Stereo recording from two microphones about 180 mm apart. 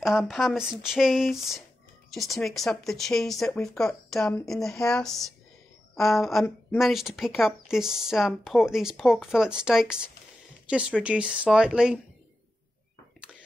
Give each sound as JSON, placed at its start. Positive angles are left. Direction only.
{"t": 0.0, "sound": "speech", "side_deg": 0}